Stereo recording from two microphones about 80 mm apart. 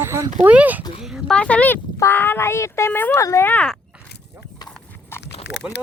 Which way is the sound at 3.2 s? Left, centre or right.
Left.